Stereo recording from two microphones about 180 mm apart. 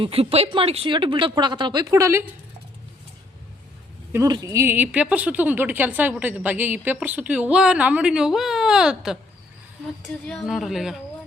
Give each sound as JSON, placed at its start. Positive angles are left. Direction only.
{"t": 0.0, "sound": "speech", "side_deg": -30}
{"t": 4.1, "sound": "a woman's voice", "side_deg": -20}
{"t": 10.2, "sound": "speech", "side_deg": 0}